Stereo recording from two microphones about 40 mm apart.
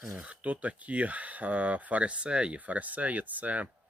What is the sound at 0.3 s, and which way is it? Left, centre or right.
Speech, right.